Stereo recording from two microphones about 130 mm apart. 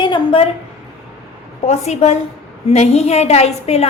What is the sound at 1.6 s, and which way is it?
A woman's voice, 60° left (ahead or behind).